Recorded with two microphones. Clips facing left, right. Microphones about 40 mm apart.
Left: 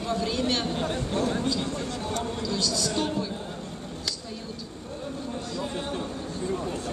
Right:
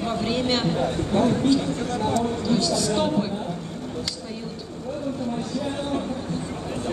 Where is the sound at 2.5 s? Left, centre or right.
Right.